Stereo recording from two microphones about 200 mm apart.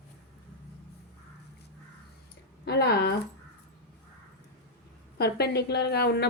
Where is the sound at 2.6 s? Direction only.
55° left (ahead or behind).